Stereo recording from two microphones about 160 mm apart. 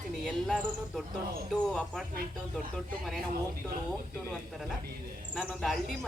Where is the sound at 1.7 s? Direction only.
5° left (ahead or behind).